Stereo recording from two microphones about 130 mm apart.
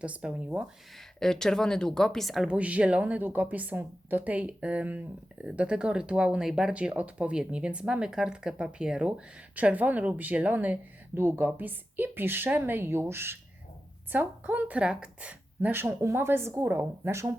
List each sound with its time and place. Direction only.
0.0 s speech: 10° right (ahead or behind)
0.9 s speech: 5° left (ahead or behind); by 17.3 s 20° right (ahead or behind)